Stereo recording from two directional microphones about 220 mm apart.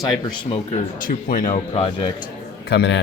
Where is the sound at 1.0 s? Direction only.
40° left (ahead or behind).